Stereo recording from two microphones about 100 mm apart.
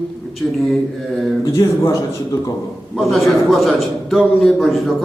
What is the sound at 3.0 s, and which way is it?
A man's voice, centre (ahead or behind).